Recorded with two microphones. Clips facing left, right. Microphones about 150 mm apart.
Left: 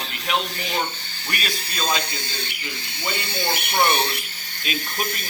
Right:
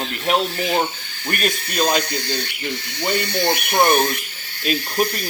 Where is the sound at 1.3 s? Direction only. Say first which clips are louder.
Right 7 dB; 55° right (ahead or behind).